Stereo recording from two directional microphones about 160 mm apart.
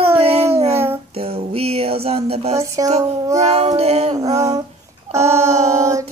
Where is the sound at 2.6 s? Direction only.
20° right (ahead or behind).